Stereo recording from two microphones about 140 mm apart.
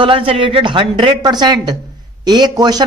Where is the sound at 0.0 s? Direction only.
40° right (ahead or behind).